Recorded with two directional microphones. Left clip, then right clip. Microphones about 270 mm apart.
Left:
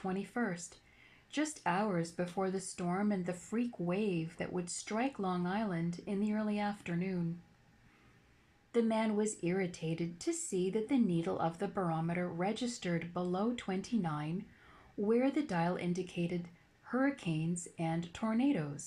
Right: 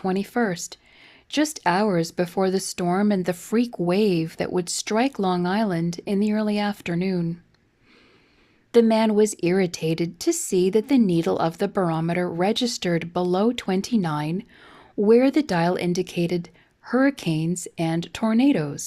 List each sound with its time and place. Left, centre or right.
0.0 s speech: right
8.7 s speech: right